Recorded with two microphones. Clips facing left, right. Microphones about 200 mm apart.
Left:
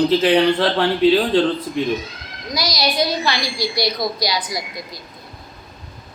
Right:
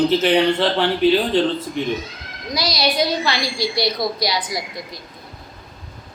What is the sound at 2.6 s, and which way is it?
A child's voice, 25° right (ahead or behind).